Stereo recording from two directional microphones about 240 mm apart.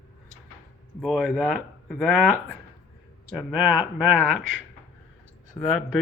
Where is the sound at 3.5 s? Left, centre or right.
Centre.